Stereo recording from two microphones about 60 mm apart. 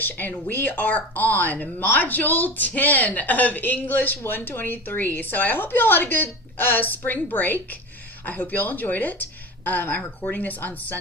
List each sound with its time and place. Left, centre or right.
0.0 s a woman's voice: left